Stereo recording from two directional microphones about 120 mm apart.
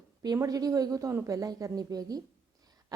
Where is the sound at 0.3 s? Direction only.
30° right (ahead or behind).